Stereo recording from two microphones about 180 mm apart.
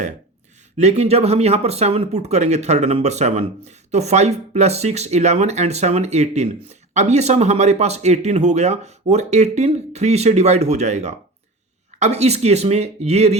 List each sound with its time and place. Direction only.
0.8 s speech: 35° right (ahead or behind)